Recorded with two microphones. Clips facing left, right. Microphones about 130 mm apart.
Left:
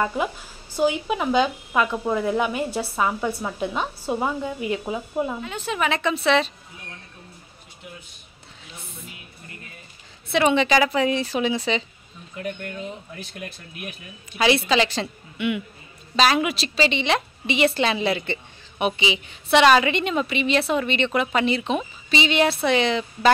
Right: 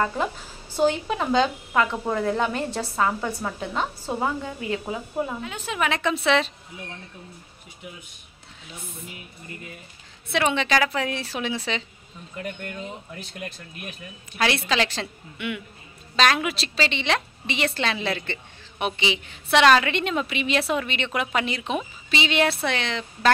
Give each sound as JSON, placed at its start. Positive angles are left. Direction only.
{"t": 0.7, "sound": "a woman's voice", "side_deg": 10}
{"t": 5.4, "sound": "a woman's voice", "side_deg": 0}
{"t": 10.3, "sound": "a woman's voice", "side_deg": 5}
{"t": 14.3, "sound": "a woman's voice", "side_deg": 5}